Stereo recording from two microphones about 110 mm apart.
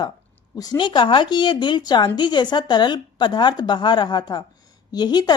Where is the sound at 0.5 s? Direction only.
40° left (ahead or behind).